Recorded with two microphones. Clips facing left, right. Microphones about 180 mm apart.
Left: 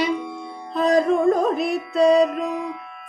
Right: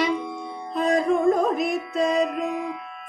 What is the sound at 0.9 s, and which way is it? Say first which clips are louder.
Music: left 2 dB; 35° left (ahead or behind).